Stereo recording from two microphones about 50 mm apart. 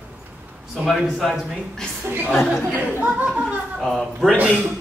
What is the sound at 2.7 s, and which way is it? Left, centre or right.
Speech, right.